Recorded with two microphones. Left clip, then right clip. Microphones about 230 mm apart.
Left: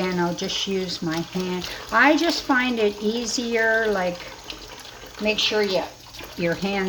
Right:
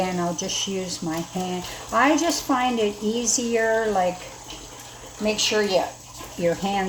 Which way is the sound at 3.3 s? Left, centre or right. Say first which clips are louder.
Left 1 dB; left.